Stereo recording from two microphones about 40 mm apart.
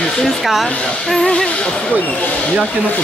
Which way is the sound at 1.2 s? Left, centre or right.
Left.